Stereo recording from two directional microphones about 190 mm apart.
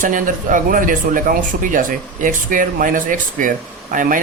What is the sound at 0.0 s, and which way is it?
Speech, 45° right (ahead or behind).